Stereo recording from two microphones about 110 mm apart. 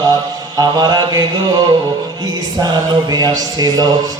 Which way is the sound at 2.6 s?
35° right (ahead or behind).